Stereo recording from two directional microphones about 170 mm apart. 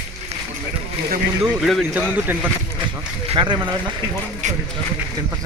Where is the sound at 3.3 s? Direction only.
25° right (ahead or behind).